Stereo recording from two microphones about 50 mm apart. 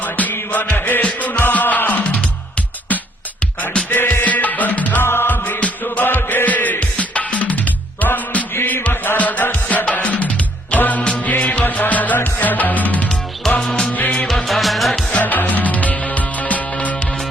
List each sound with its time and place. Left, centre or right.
0.0 s music: left
3.8 s music: left
5.0 s music: left
13.6 s music: centre
14.3 s music: centre
15.1 s music: left